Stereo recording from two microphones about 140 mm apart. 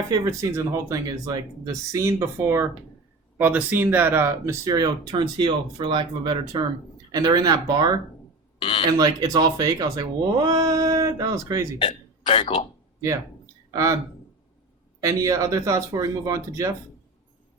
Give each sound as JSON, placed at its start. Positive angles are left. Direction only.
{"t": 0.1, "sound": "speech", "side_deg": -25}
{"t": 8.5, "sound": "a sound", "side_deg": 40}
{"t": 8.9, "sound": "speech", "side_deg": -25}
{"t": 12.2, "sound": "speech", "side_deg": 40}
{"t": 13.7, "sound": "speech", "side_deg": -25}
{"t": 15.0, "sound": "speech", "side_deg": -20}